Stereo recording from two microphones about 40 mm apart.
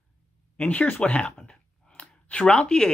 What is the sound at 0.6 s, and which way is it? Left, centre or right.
Speech, left.